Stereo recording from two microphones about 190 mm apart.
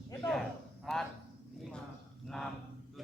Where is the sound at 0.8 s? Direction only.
Centre (ahead or behind).